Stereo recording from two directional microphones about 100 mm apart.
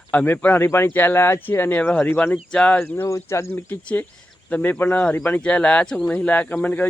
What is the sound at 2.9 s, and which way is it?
Speech, 25° left (ahead or behind).